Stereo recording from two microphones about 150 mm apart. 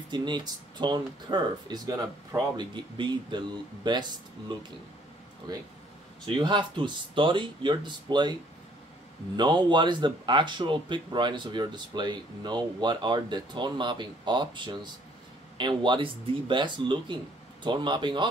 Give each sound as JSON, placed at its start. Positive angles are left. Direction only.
{"t": 0.1, "sound": "speech", "side_deg": -30}
{"t": 9.4, "sound": "speech", "side_deg": -30}